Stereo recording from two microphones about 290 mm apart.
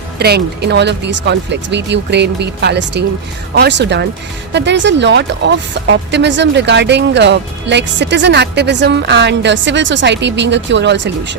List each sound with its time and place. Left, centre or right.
0.2 s speech: right